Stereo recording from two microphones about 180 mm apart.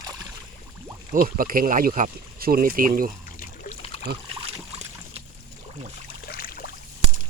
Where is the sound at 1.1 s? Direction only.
50° right (ahead or behind).